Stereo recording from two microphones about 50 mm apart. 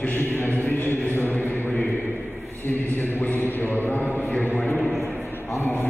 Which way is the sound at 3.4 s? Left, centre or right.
Left.